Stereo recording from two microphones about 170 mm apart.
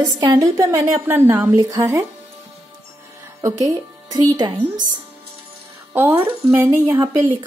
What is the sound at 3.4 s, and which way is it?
A woman's voice, 15° right (ahead or behind).